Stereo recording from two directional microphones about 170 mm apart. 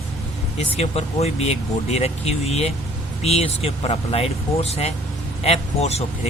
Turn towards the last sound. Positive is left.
turn(degrees=40)  # may be behind; listen again after turning